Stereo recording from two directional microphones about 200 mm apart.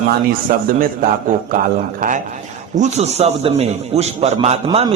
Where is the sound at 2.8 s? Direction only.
35° right (ahead or behind).